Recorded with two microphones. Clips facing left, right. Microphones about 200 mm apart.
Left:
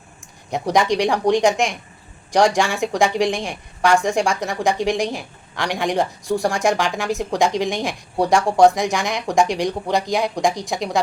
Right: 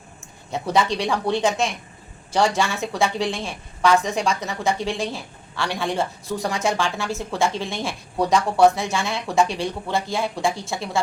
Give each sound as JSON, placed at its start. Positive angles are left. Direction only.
{"t": 0.5, "sound": "a woman's voice", "side_deg": 15}